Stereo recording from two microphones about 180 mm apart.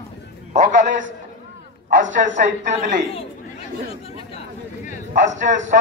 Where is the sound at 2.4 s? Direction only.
40° right (ahead or behind).